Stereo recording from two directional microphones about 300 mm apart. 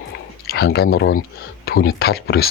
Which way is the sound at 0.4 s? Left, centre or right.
Left.